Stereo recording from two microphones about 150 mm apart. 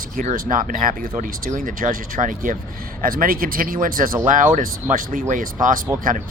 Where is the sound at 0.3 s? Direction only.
65° right (ahead or behind).